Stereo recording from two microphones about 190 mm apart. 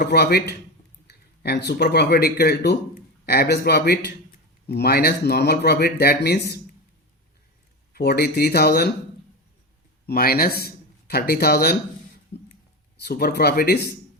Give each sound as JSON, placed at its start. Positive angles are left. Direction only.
{"t": 0.0, "sound": "speech", "side_deg": 55}
{"t": 7.9, "sound": "speech", "side_deg": 55}
{"t": 10.1, "sound": "speech", "side_deg": 55}
{"t": 13.1, "sound": "speech", "side_deg": 55}